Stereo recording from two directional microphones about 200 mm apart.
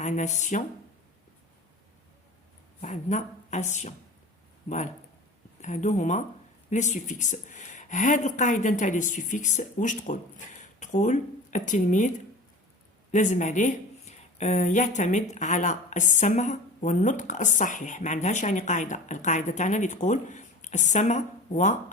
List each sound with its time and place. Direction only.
0.0 s speech: 35° left (ahead or behind)
2.8 s speech: 35° left (ahead or behind)
5.6 s speech: 35° left (ahead or behind)